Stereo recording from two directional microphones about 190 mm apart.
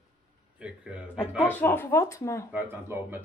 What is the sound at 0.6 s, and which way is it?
Speech, 5° right (ahead or behind).